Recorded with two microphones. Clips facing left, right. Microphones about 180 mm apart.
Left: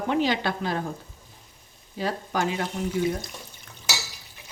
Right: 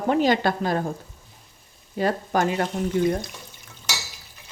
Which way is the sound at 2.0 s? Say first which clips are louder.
Right 5 dB; 50° right (ahead or behind).